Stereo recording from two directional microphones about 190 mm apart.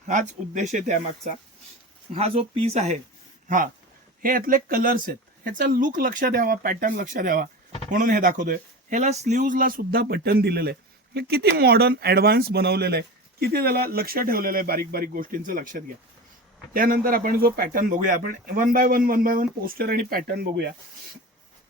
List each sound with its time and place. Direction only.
0.1 s speech: 40° right (ahead or behind)
4.2 s speech: 50° right (ahead or behind)